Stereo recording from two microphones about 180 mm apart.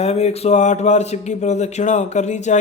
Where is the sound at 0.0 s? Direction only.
35° left (ahead or behind).